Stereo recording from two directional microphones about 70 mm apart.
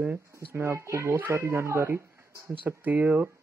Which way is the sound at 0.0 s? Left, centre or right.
Right.